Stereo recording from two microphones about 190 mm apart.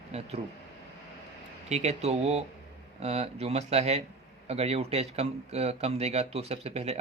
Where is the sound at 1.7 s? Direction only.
35° right (ahead or behind).